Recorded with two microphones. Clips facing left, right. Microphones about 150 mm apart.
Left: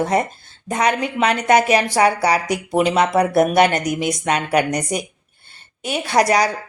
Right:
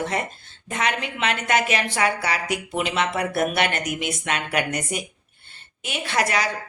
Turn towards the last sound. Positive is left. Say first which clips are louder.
# left 7 dB
turn(degrees=35)  # may be behind; listen again after turning